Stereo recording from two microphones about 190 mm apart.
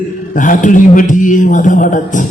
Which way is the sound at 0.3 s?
45° left (ahead or behind).